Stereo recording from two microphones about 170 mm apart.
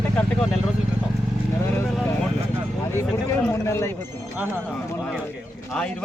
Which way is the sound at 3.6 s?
15° left (ahead or behind).